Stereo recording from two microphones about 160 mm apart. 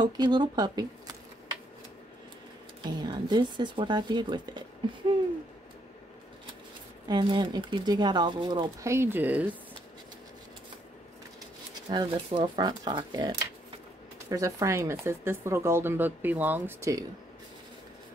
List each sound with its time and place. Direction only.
0.0 s a sound: 25° right (ahead or behind)
2.8 s speech: 30° right (ahead or behind)
7.1 s speech: 30° right (ahead or behind)
8.8 s speech: 15° right (ahead or behind)
11.9 s speech: 30° right (ahead or behind); by 17.0 s 15° right (ahead or behind)